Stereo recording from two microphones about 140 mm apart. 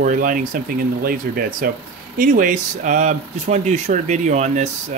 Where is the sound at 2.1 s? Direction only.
75° right (ahead or behind); by 4.7 s 60° right (ahead or behind).